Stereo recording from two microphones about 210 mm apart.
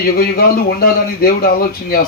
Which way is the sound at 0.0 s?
45° left (ahead or behind).